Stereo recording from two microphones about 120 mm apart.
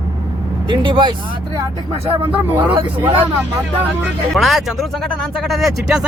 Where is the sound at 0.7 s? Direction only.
40° right (ahead or behind).